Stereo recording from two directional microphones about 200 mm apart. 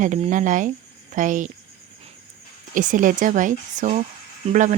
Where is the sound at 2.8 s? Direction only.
40° right (ahead or behind).